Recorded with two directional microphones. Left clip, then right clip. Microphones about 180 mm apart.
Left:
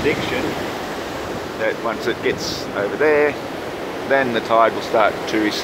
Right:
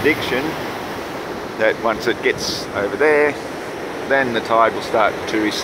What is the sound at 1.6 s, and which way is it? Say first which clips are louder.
Speech: right 4 dB; 15° right (ahead or behind).